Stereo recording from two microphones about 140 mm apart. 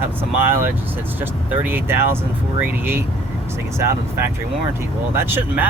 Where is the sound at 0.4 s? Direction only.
15° right (ahead or behind).